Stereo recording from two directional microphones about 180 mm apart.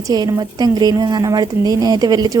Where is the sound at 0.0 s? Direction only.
20° right (ahead or behind).